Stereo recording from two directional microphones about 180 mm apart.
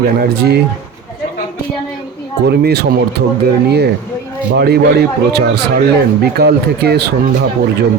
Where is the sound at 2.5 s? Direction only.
65° right (ahead or behind).